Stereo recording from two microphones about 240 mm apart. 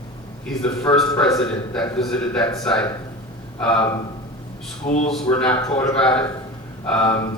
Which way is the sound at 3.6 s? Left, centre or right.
Centre.